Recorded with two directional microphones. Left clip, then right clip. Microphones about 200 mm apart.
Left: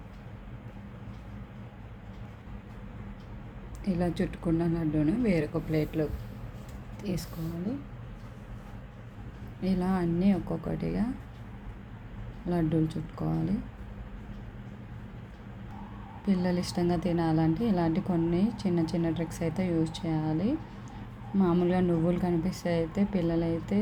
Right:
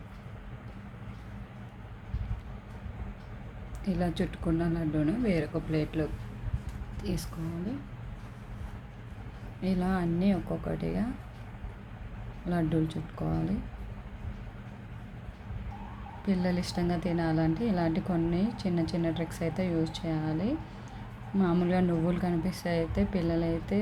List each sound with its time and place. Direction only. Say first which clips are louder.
3.8 s a woman's voice: left 1 dB; 5° left (ahead or behind)
9.6 s a woman's voice: left 1 dB; 5° left (ahead or behind)
12.5 s a woman's voice: left 1 dB; 5° left (ahead or behind)
16.2 s a woman's voice: left 1 dB; 5° left (ahead or behind)